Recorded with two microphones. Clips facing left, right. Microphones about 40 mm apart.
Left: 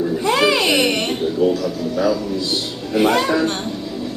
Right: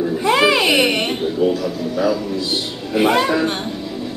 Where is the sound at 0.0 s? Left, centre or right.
Centre.